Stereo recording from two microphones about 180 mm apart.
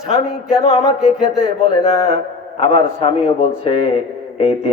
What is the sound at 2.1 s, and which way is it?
A man's voice, 35° left (ahead or behind).